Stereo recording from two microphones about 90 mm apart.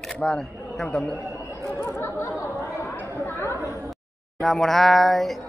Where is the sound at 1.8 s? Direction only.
30° left (ahead or behind).